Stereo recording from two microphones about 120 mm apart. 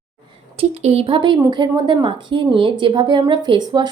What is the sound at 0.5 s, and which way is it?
A woman's voice, 60° right (ahead or behind).